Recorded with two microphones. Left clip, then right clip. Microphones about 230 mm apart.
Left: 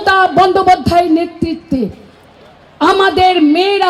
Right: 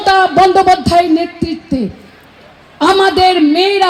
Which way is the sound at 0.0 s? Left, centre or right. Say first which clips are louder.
Right 1 dB; right.